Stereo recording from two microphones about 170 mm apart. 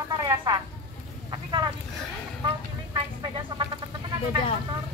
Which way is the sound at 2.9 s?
25° right (ahead or behind).